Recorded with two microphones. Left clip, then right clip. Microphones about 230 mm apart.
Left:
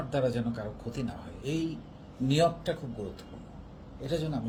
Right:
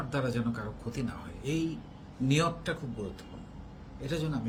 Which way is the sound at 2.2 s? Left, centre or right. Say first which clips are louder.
Left 3 dB; centre.